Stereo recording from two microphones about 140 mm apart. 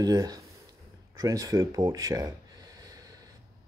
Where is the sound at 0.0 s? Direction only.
25° right (ahead or behind).